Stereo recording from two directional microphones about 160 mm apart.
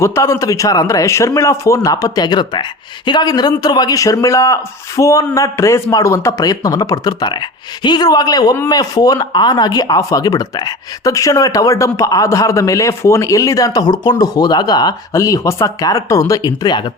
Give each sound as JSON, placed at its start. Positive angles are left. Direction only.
{"t": 0.0, "sound": "speech", "side_deg": 20}